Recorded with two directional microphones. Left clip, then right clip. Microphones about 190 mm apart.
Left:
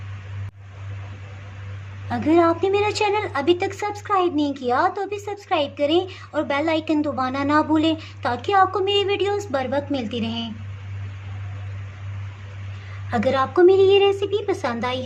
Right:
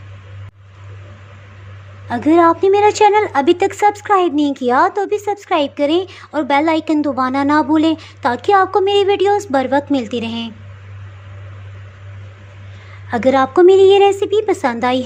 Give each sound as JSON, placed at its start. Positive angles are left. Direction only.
{"t": 2.0, "sound": "a woman's voice", "side_deg": -30}
{"t": 13.1, "sound": "a child's voice", "side_deg": -30}